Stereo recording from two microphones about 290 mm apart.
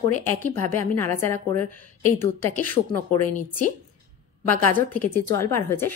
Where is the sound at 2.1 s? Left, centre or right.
Right.